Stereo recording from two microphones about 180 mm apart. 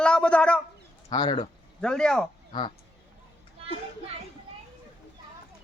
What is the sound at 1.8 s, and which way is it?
Speech, 5° left (ahead or behind).